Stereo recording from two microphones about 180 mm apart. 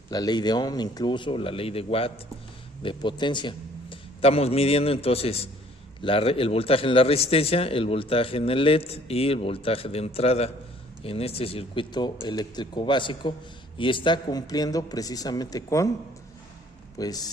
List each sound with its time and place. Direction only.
0.1 s speech: 25° left (ahead or behind)
17.0 s speech: 20° left (ahead or behind)